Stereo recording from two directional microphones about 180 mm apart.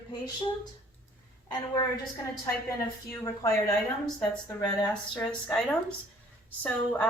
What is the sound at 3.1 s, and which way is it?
Speech, 20° left (ahead or behind).